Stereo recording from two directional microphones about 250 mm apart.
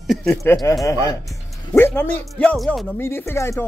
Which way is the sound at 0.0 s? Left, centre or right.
Centre.